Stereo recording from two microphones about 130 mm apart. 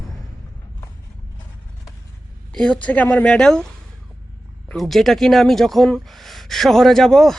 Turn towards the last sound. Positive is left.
turn(degrees=0)  # may be behind; listen again after turning